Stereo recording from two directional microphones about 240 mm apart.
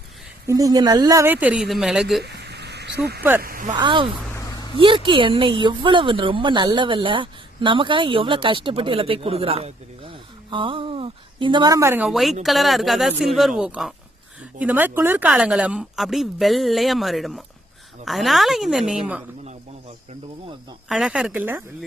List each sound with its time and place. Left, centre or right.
0.4 s a woman's voice: centre
2.2 s a sound: right
3.4 s speech: right
3.7 s a woman's voice: centre
4.4 s a sound: centre
4.8 s a woman's voice: right; by 19.2 s centre
20.9 s a woman's voice: centre